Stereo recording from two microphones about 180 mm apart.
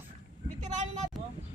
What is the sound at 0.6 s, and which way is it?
Vehicle, 40° right (ahead or behind).